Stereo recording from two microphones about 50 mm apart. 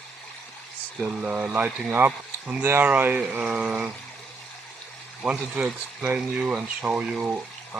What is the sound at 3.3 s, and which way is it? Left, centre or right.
Speech, right.